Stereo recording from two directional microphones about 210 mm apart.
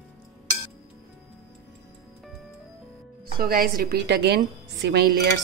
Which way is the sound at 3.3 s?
45° right (ahead or behind).